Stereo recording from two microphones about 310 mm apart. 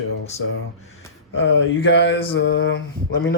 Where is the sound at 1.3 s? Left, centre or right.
Left.